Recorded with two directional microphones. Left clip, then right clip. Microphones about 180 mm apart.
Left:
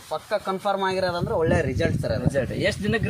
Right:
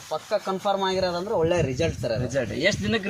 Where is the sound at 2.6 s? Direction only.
20° left (ahead or behind).